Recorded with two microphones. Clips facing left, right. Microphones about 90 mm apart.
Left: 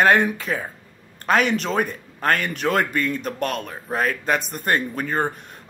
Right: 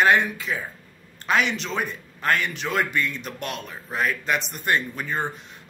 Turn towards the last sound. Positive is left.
turn(degrees=45)  # may be behind; listen again after turning